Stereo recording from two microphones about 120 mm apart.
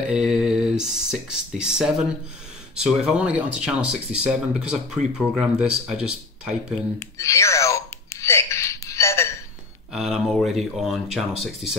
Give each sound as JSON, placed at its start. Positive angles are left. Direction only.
{"t": 0.0, "sound": "speech", "side_deg": -5}
{"t": 7.0, "sound": "a sound", "side_deg": 25}
{"t": 9.9, "sound": "speech", "side_deg": -5}